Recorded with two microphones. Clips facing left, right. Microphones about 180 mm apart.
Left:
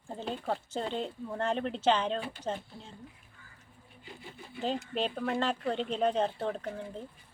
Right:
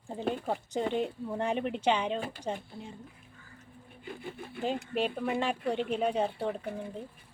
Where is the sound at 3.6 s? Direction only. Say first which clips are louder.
Right 8 dB; 55° right (ahead or behind).